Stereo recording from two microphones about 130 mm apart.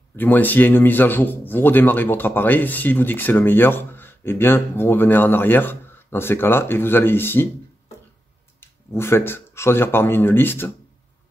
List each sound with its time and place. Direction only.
0.1 s a man's voice: 15° left (ahead or behind)
8.5 s speech: 20° left (ahead or behind)